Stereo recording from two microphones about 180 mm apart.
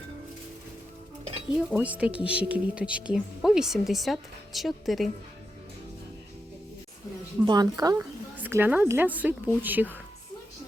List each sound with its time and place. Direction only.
1.5 s speech: 5° right (ahead or behind)
7.4 s a woman's voice: 20° right (ahead or behind)